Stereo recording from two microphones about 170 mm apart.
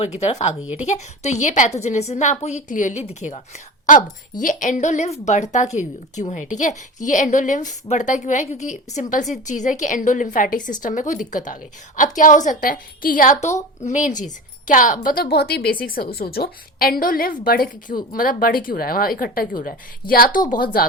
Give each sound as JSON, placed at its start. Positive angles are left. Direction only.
{"t": 0.0, "sound": "a woman's voice", "side_deg": 40}
{"t": 0.6, "sound": "speech", "side_deg": -5}
{"t": 0.9, "sound": "a woman's voice", "side_deg": 40}